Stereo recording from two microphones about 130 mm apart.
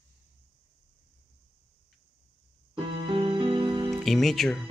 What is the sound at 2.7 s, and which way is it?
Music, 40° right (ahead or behind).